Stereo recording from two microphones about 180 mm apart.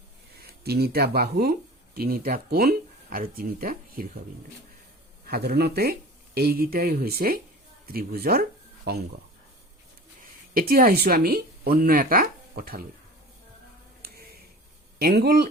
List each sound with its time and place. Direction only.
0.3 s speech: 60° right (ahead or behind)
5.2 s speech: 60° right (ahead or behind)
10.5 s speech: 55° right (ahead or behind)
14.0 s tick-tock: 60° right (ahead or behind)
14.9 s speech: 60° right (ahead or behind)